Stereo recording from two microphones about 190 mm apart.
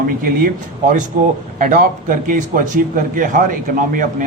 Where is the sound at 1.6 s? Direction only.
45° right (ahead or behind).